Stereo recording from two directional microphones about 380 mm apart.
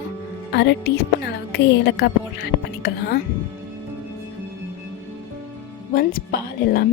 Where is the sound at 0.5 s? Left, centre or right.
Left.